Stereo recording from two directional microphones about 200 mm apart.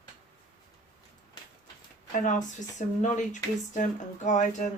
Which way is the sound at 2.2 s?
40° left (ahead or behind).